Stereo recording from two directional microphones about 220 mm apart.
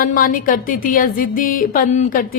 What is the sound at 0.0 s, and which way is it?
A woman's voice, 40° left (ahead or behind).